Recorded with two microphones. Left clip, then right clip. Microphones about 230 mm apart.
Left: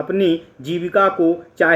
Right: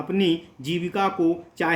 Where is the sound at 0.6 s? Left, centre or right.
Centre.